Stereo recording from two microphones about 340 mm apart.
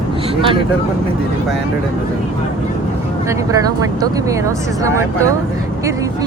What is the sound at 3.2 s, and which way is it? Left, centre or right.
Speech, centre.